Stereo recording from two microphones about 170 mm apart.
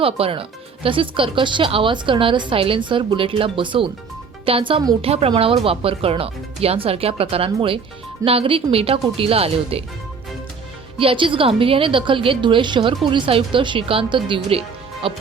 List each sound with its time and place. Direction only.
0.0 s speech: 35° right (ahead or behind)
10.9 s speech: 30° right (ahead or behind)